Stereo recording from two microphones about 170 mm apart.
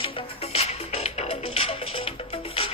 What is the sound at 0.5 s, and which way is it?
Music, 35° left (ahead or behind).